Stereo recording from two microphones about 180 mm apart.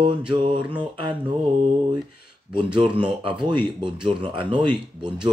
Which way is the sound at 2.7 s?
30° right (ahead or behind).